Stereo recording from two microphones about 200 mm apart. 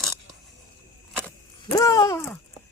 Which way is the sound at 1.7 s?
15° left (ahead or behind).